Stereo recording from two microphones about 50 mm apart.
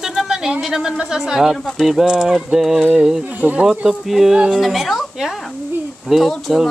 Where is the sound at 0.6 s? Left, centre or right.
Centre.